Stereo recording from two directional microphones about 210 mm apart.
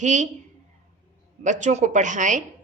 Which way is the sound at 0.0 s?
35° right (ahead or behind).